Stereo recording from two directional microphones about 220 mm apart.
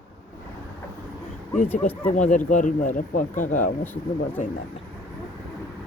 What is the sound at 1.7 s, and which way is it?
Speech, 10° left (ahead or behind).